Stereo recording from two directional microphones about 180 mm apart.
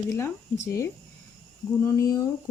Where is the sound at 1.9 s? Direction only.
20° left (ahead or behind).